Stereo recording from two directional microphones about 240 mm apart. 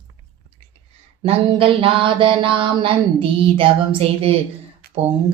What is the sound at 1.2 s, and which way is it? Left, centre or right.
Mantra, right.